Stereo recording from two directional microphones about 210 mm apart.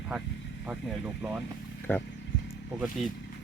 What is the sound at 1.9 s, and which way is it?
Speech, 10° left (ahead or behind).